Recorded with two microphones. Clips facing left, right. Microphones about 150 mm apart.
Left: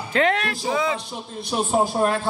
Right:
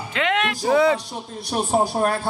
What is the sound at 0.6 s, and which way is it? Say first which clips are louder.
Speech: right 7 dB; 65° right (ahead or behind).